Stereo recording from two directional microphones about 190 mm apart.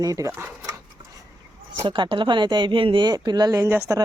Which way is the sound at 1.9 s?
25° right (ahead or behind).